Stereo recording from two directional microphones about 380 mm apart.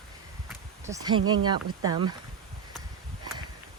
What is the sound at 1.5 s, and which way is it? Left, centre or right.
Speech, centre.